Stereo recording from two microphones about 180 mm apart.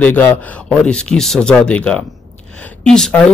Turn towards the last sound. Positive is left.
turn(degrees=5)  # may be behind; listen again after turning